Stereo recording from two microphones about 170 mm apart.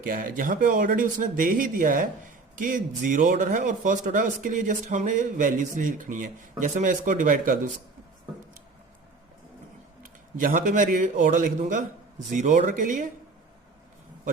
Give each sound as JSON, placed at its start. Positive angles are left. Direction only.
{"t": 0.0, "sound": "speech", "side_deg": -55}
{"t": 10.0, "sound": "speech", "side_deg": -50}